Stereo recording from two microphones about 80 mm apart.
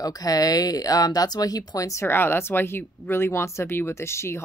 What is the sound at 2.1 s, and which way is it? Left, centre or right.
Speech, left.